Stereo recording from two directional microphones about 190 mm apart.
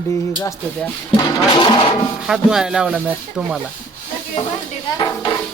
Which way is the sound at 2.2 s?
5° right (ahead or behind).